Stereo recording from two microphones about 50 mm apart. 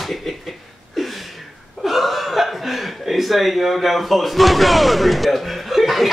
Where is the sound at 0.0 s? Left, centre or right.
Centre.